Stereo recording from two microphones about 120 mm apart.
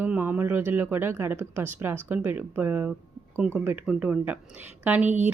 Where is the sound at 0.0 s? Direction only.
15° right (ahead or behind).